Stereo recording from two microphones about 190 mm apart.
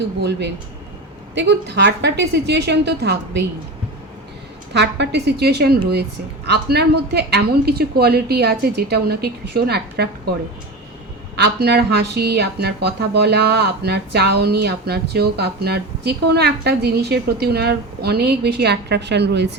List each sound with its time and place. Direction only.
0.2 s speech: 65° right (ahead or behind)
4.7 s speech: 65° right (ahead or behind)
11.3 s speech: 60° right (ahead or behind)